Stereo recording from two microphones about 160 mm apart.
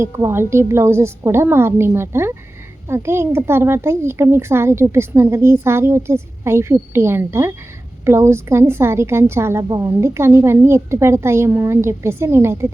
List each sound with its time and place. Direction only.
0.0 s a woman's voice: 20° right (ahead or behind)